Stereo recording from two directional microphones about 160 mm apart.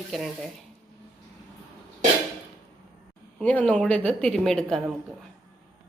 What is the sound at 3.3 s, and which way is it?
A woman's voice, 10° left (ahead or behind).